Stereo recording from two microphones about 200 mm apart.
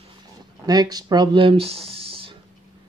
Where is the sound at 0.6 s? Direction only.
20° right (ahead or behind).